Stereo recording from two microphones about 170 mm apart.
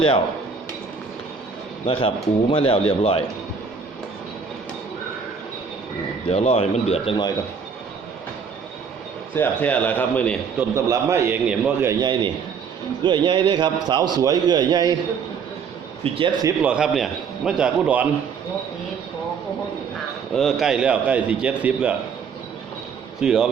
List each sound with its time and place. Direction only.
1.8 s a man's voice: 35° left (ahead or behind)
6.2 s a man's voice: 40° left (ahead or behind)
9.3 s a man's voice: 10° left (ahead or behind)
10.8 s a man's voice: 15° right (ahead or behind)
16.1 s a man's voice: 25° right (ahead or behind)
16.6 s a man's voice: 5° right (ahead or behind)
20.3 s a man's voice: centre (ahead or behind)
23.2 s a man's voice: 5° right (ahead or behind)